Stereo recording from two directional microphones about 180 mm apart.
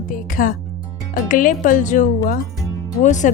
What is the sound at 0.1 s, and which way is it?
Music, 50° left (ahead or behind).